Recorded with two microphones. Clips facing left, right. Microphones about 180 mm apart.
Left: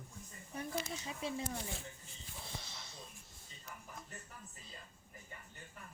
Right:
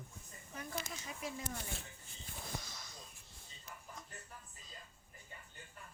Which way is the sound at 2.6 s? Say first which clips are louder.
Even; 25° left (ahead or behind).